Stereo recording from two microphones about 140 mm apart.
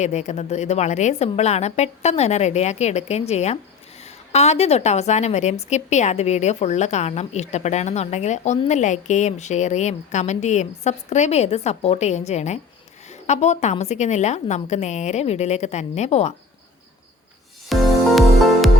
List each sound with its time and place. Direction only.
0.0 s a woman's voice: 55° left (ahead or behind)
17.7 s music: centre (ahead or behind)